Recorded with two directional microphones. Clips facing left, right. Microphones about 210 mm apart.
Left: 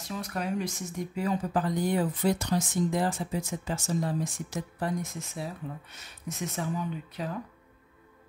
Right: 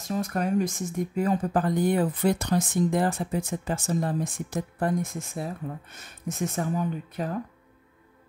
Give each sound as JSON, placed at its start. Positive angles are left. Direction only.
{"t": 0.0, "sound": "speech", "side_deg": -45}